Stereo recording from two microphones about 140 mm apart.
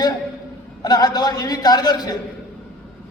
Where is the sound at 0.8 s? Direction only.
30° left (ahead or behind).